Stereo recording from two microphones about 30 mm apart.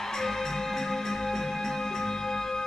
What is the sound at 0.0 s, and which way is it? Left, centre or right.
Music, centre.